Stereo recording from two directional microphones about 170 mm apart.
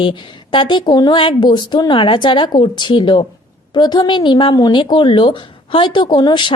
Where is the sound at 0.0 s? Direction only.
30° left (ahead or behind).